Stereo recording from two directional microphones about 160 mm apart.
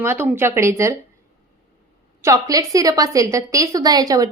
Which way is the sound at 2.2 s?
20° right (ahead or behind).